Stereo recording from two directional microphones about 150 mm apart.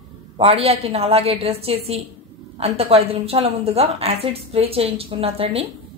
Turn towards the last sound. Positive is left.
turn(degrees=-40)  # may be behind; listen again after turning